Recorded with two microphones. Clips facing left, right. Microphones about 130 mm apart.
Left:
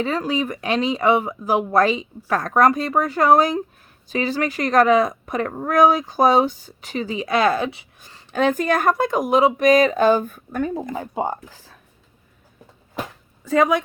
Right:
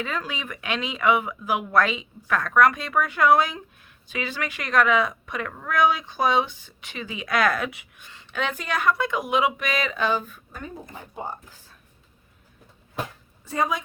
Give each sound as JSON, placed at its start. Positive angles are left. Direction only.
{"t": 0.0, "sound": "a woman's voice", "side_deg": 35}
{"t": 13.6, "sound": "a woman's voice", "side_deg": 65}